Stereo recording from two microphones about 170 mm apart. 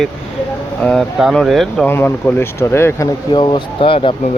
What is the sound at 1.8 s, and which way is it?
Speech, 10° left (ahead or behind).